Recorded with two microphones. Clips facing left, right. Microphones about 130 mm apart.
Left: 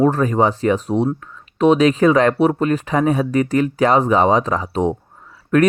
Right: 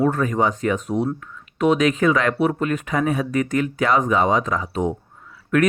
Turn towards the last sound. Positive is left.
turn(degrees=35)  # may be behind; listen again after turning